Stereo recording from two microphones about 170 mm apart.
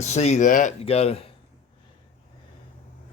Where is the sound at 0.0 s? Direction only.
40° left (ahead or behind).